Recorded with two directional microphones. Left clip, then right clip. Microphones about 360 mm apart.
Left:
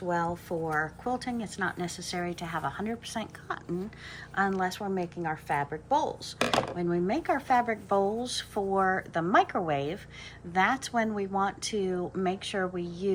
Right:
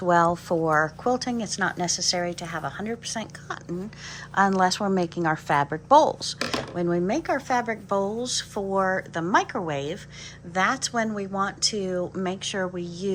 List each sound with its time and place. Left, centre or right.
0.4 s a woman's voice: centre